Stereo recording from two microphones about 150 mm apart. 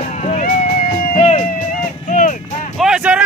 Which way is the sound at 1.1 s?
40° left (ahead or behind).